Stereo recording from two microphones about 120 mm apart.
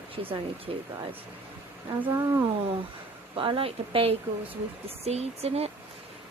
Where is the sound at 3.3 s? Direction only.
45° right (ahead or behind).